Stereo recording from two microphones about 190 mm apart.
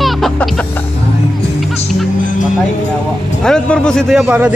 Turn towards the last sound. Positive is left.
turn(degrees=-5)  # may be behind; listen again after turning